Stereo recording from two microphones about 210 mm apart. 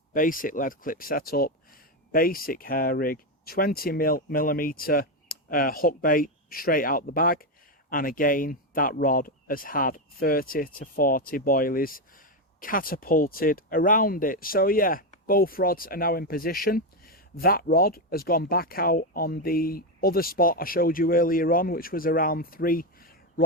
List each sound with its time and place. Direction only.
0.1 s speech: 40° left (ahead or behind)